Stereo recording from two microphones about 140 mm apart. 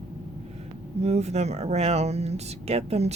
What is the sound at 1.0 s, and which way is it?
Speech, 50° right (ahead or behind).